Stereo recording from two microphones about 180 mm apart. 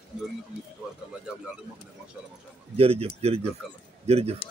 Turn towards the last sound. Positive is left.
turn(degrees=-35)  # may be behind; listen again after turning